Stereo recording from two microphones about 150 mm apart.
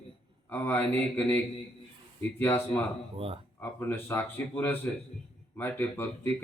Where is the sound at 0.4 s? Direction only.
15° left (ahead or behind).